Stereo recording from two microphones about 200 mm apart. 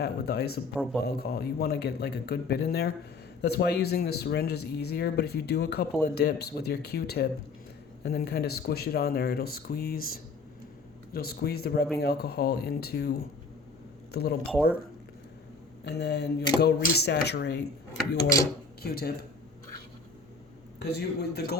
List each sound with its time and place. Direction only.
0.0 s speech: 55° left (ahead or behind)
15.8 s speech: 55° left (ahead or behind)
20.7 s speech: 55° left (ahead or behind)